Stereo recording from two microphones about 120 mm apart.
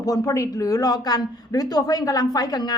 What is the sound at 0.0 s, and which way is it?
Speech, 30° left (ahead or behind).